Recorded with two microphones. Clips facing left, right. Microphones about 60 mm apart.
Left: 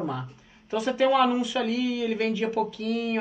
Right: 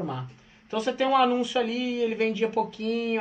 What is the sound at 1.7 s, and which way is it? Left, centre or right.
Speech, right.